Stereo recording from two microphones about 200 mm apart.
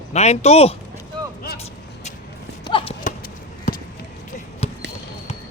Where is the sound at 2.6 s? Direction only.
25° left (ahead or behind).